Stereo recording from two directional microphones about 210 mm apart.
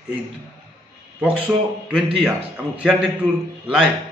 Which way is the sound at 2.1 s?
5° right (ahead or behind).